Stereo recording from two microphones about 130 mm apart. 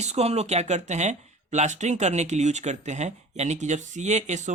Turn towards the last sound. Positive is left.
turn(degrees=-65)  # may be behind; listen again after turning